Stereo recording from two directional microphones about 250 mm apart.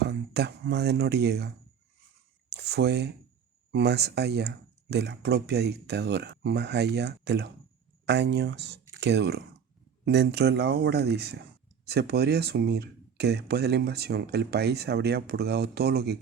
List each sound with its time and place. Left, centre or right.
0.0 s speech: right
2.5 s a sound: right
3.7 s speech: right